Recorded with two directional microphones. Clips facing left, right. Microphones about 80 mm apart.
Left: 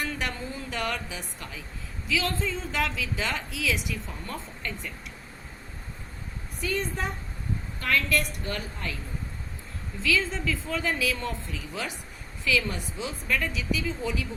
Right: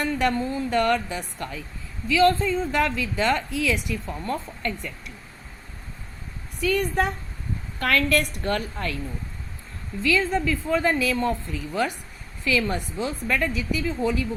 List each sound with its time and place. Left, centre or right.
0.0 s a woman's voice: right
6.7 s a woman's voice: right
7.8 s speech: right
10.1 s a woman's voice: right